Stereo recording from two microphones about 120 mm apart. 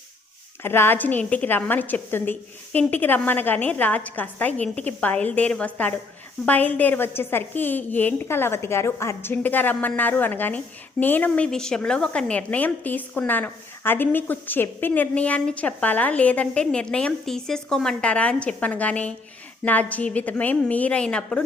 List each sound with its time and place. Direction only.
0.6 s a woman's voice: 20° left (ahead or behind)